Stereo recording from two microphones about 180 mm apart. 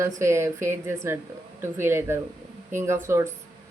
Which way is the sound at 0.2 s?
15° right (ahead or behind).